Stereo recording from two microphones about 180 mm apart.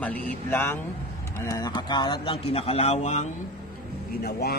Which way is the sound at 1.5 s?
25° left (ahead or behind).